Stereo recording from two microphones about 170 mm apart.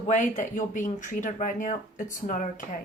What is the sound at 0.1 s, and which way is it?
Speech, 45° left (ahead or behind).